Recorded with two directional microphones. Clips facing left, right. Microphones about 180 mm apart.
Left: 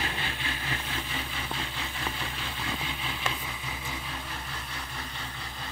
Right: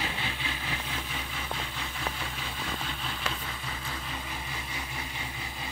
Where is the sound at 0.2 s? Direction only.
5° right (ahead or behind).